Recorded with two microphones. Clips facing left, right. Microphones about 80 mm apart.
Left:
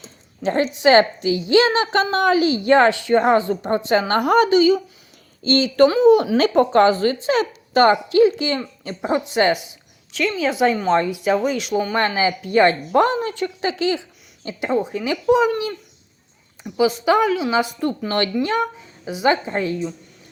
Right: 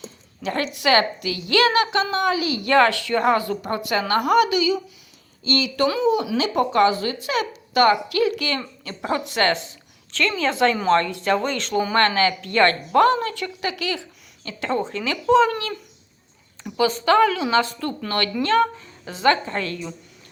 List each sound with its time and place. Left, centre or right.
0.4 s speech: left
1.9 s speech: left; by 15.7 s centre
16.7 s speech: centre